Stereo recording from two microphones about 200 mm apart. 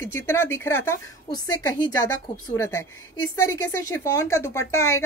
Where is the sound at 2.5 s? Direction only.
15° left (ahead or behind).